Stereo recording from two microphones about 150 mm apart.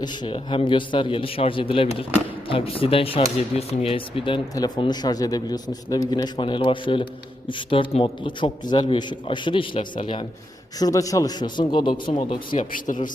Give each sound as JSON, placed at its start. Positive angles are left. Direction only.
{"t": 0.0, "sound": "speech", "side_deg": 30}
{"t": 4.5, "sound": "speech", "side_deg": 25}
{"t": 10.8, "sound": "speech", "side_deg": 25}